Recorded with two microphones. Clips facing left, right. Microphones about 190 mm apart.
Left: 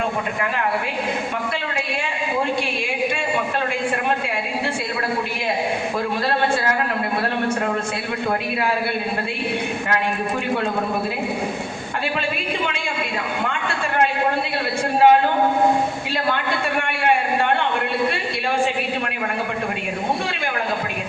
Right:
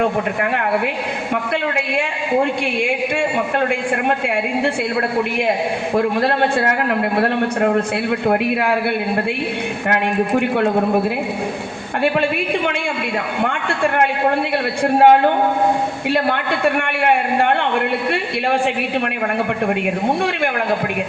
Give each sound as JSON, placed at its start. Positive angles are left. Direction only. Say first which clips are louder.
{"t": 6.0, "sound": "a man's voice", "louder": "right 6 dB", "side_deg": -65}
{"t": 9.9, "sound": "a man's voice", "louder": "right 7 dB", "side_deg": -60}
{"t": 13.4, "sound": "a sound", "louder": "right 6 dB", "side_deg": -60}
{"t": 14.9, "sound": "a man's voice", "louder": "right 3 dB", "side_deg": -60}